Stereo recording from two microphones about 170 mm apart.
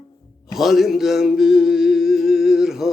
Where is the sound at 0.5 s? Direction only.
Centre (ahead or behind).